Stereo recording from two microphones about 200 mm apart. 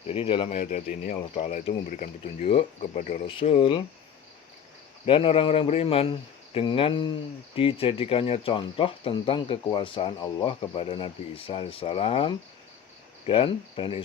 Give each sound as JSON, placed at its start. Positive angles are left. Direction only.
{"t": 0.1, "sound": "speech", "side_deg": 25}
{"t": 0.6, "sound": "speech", "side_deg": 40}
{"t": 5.0, "sound": "speech", "side_deg": 25}